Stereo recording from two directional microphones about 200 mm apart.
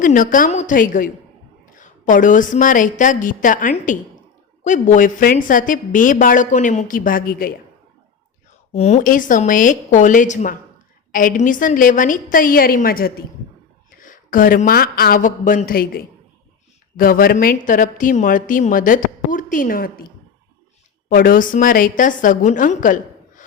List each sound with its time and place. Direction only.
0.0 s a woman's voice: 40° left (ahead or behind)
8.7 s a woman's voice: 35° left (ahead or behind)
21.1 s a woman's voice: 45° left (ahead or behind)